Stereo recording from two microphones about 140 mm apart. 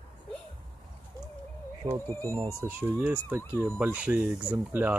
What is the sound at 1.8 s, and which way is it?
Insect, 25° right (ahead or behind).